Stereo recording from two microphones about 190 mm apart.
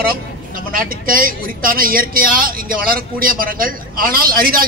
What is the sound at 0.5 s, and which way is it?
Speech, 50° right (ahead or behind).